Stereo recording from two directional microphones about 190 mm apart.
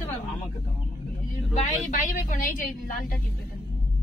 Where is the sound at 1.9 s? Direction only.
45° left (ahead or behind).